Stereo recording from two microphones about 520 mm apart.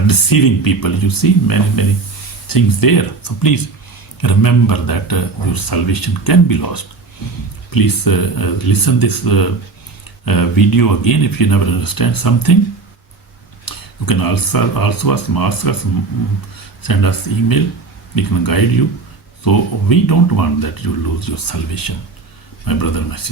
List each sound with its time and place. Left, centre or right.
0.1 s a man's voice: left
13.7 s a man's voice: left
16.8 s a man's voice: left